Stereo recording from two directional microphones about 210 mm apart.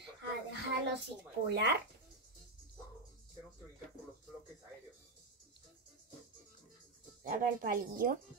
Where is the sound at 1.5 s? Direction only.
55° right (ahead or behind).